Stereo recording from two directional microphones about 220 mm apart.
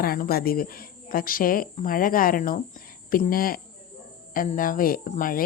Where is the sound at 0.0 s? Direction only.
40° left (ahead or behind).